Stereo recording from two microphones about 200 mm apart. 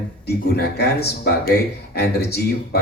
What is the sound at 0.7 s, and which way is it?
Speech, 55° left (ahead or behind).